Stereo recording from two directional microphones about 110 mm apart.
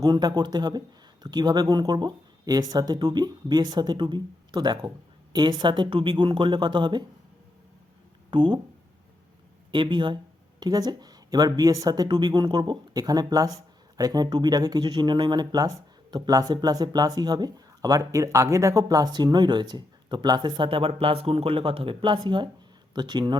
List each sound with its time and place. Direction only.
0.0 s speech: 40° right (ahead or behind)
8.3 s speech: 45° right (ahead or behind)
9.7 s speech: 45° right (ahead or behind)